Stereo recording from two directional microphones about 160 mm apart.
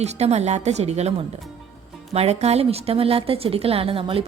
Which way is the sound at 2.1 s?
40° right (ahead or behind).